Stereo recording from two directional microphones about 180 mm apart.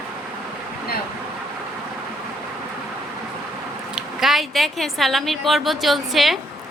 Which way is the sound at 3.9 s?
Centre (ahead or behind).